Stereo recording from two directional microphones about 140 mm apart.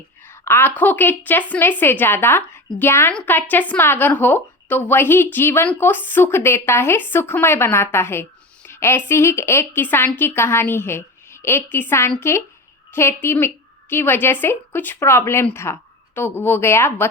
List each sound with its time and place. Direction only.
0.3 s a woman's voice: 15° left (ahead or behind)